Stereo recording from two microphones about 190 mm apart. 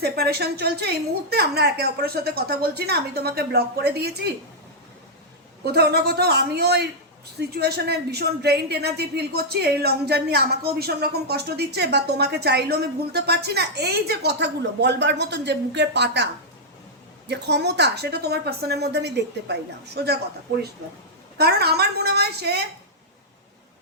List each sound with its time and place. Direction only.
0.0 s a woman's voice: 55° right (ahead or behind)
5.6 s a woman's voice: 55° right (ahead or behind)
21.3 s a woman's voice: 55° right (ahead or behind)